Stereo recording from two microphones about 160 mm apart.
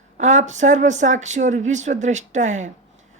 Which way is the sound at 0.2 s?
50° right (ahead or behind).